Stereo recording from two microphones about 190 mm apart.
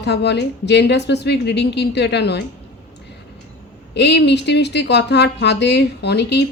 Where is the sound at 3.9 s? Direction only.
65° left (ahead or behind).